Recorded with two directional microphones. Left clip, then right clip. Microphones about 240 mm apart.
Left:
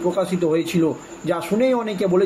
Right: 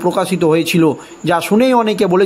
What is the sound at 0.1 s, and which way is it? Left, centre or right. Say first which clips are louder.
A man's voice: right 8 dB; right.